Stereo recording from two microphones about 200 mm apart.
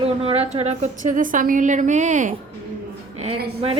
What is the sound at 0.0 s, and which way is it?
A woman's voice, 30° right (ahead or behind).